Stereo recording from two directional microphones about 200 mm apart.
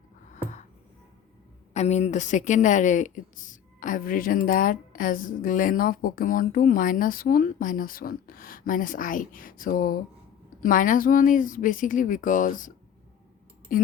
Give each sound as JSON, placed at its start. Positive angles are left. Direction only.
{"t": 1.7, "sound": "a woman's voice", "side_deg": 35}